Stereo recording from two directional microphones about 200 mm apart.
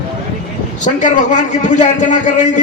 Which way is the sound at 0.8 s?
40° left (ahead or behind).